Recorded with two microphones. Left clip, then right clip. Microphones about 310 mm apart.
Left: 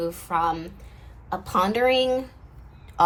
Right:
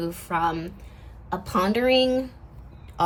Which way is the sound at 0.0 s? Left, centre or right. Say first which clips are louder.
Left 1 dB; centre.